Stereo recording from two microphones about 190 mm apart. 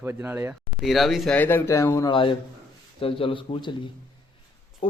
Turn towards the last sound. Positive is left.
turn(degrees=25)  # may be behind; listen again after turning